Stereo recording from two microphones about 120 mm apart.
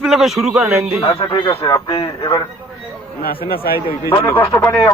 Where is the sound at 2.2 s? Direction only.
25° left (ahead or behind).